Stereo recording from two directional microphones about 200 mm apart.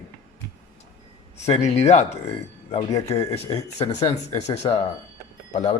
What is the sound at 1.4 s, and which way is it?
Speech, 35° left (ahead or behind).